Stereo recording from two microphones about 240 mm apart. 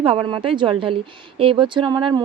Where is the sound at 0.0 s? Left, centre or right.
Right.